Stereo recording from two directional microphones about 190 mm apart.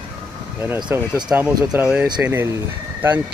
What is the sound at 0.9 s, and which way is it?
Speech, 10° right (ahead or behind).